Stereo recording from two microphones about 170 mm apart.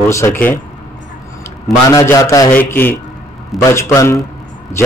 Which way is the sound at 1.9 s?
20° left (ahead or behind).